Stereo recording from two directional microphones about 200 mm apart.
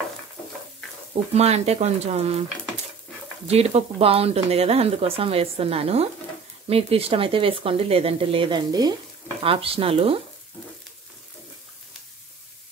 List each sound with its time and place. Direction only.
1.3 s speech: 30° right (ahead or behind)
3.4 s speech: 30° right (ahead or behind)